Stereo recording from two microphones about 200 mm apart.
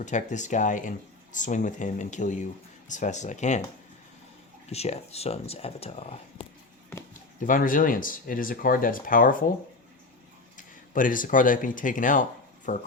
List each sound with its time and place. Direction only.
0.0 s speech: 40° left (ahead or behind)
4.7 s speech: 30° left (ahead or behind)
7.4 s speech: 40° left (ahead or behind)
10.6 s speech: 40° left (ahead or behind)